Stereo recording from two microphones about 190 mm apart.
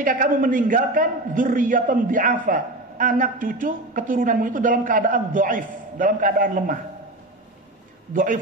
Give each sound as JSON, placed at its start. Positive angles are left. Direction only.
{"t": 0.0, "sound": "a man's voice", "side_deg": -45}
{"t": 8.1, "sound": "a man's voice", "side_deg": -45}